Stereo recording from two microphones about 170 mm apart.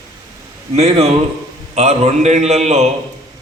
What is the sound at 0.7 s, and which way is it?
A man's voice, 40° right (ahead or behind).